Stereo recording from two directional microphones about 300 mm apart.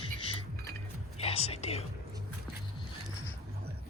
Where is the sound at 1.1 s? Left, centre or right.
Centre.